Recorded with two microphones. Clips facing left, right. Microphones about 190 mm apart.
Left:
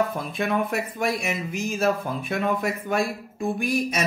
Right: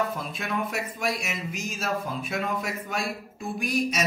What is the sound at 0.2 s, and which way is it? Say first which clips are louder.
Speech: left 5 dB; 55° left (ahead or behind).